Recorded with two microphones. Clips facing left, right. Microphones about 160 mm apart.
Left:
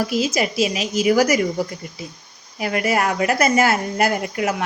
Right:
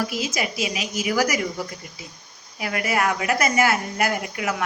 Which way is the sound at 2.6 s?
30° left (ahead or behind).